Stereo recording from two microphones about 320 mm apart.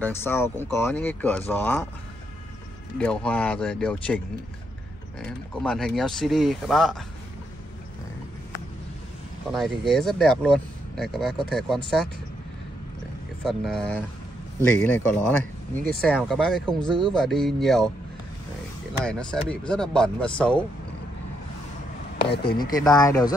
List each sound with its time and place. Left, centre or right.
0.0 s speech: centre
3.0 s speech: centre
5.2 s speech: centre
9.5 s speech: centre
13.4 s speech: centre
19.0 s speech: centre
22.3 s speech: left
22.7 s speech: centre